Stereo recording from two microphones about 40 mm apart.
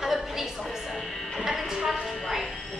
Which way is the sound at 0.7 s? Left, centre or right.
Centre.